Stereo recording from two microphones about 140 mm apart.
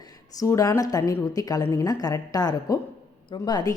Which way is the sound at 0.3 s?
25° left (ahead or behind).